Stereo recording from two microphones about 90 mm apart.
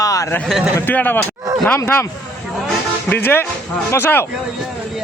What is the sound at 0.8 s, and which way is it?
Speech, 20° left (ahead or behind).